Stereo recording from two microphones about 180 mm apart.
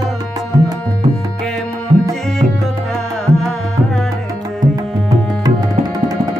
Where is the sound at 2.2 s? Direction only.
Centre (ahead or behind).